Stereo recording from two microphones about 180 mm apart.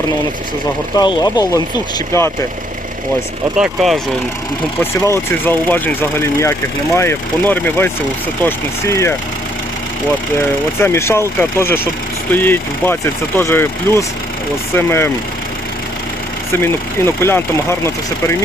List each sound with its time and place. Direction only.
0.9 s speech: 20° left (ahead or behind)
3.6 s speech: centre (ahead or behind)
4.8 s speech: 15° left (ahead or behind)
10.8 s speech: 15° left (ahead or behind)
17.2 s speech: 15° left (ahead or behind)